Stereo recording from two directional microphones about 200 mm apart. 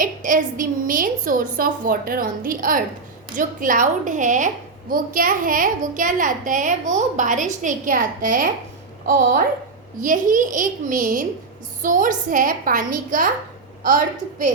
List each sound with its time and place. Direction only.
0.0 s a woman's voice: 40° right (ahead or behind)
10.0 s a child's voice: 40° right (ahead or behind)